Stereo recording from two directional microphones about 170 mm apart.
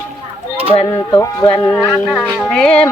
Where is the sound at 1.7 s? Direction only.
Centre (ahead or behind).